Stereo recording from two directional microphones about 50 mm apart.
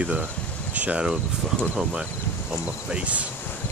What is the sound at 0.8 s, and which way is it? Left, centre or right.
Speech, right.